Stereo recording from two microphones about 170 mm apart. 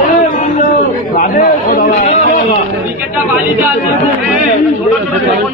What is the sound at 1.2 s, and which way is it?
Chatter, 50° left (ahead or behind).